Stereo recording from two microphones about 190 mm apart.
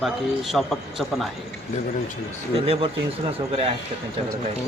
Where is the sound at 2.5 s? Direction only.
30° right (ahead or behind).